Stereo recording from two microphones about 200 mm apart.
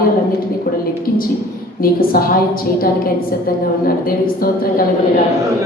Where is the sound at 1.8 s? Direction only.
45° left (ahead or behind).